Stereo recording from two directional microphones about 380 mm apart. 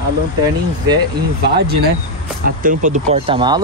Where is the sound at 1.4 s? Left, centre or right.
Right.